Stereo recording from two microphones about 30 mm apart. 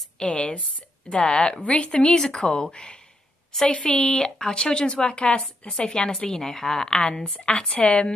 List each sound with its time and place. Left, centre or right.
0.2 s a woman's voice: left
1.2 s a woman's voice: left
1.6 s speech: left
1.9 s a woman's voice: left
3.6 s a woman's voice: left
4.2 s a woman's voice: left
5.0 s a woman's voice: left
5.7 s a woman's voice: left
7.7 s a woman's voice: left